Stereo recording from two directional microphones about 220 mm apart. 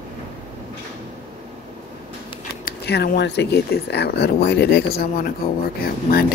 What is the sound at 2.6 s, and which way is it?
Speech, 45° left (ahead or behind).